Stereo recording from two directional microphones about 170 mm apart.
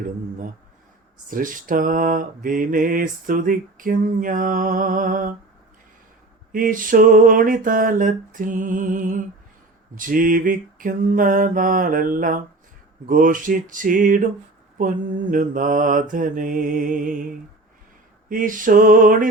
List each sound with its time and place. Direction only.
1.3 s mantra: 55° right (ahead or behind)
6.5 s mantra: 55° right (ahead or behind)
18.3 s mantra: 55° right (ahead or behind)